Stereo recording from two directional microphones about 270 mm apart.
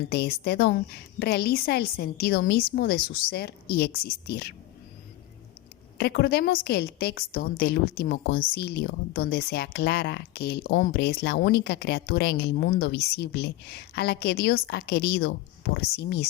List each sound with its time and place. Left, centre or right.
0.1 s a woman's voice: left
6.0 s a woman's voice: left